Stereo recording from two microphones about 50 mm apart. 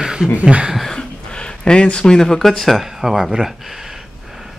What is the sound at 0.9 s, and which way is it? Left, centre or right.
Speech, centre.